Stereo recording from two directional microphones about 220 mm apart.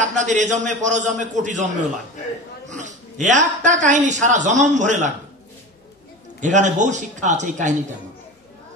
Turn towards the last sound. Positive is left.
turn(degrees=-35)  # may be behind; listen again after turning